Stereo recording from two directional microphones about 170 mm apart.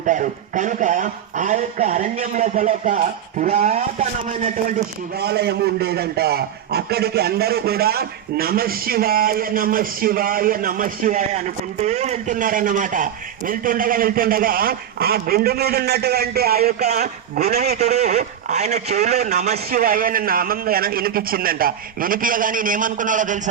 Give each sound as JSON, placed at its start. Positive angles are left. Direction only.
{"t": 0.0, "sound": "speech", "side_deg": -50}
{"t": 5.2, "sound": "a man's voice", "side_deg": -70}
{"t": 17.6, "sound": "a man's voice", "side_deg": -40}
{"t": 19.8, "sound": "a man's voice", "side_deg": -55}